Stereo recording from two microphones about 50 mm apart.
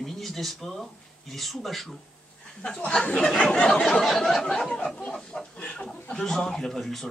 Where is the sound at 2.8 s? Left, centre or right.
Centre.